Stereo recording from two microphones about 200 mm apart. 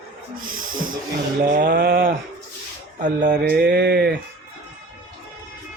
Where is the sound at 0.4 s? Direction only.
45° right (ahead or behind).